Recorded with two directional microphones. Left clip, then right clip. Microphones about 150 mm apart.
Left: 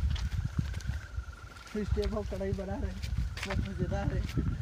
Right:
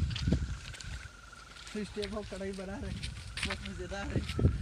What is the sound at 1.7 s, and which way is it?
Speech, 30° left (ahead or behind).